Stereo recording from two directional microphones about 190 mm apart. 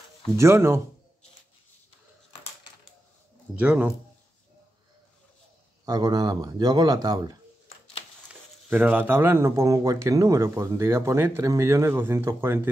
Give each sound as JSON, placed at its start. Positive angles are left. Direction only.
{"t": 0.4, "sound": "speech", "side_deg": -15}
{"t": 3.5, "sound": "speech", "side_deg": -10}
{"t": 5.9, "sound": "speech", "side_deg": -20}
{"t": 8.3, "sound": "speech", "side_deg": -5}